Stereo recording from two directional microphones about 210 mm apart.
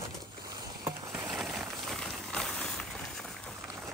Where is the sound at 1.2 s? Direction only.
Centre (ahead or behind).